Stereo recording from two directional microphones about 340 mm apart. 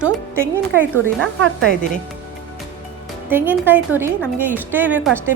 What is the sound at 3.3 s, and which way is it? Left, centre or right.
A woman's voice, centre.